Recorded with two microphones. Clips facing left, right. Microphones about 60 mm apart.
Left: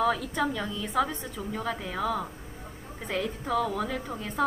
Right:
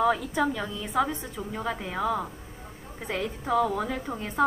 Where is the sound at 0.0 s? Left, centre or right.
Centre.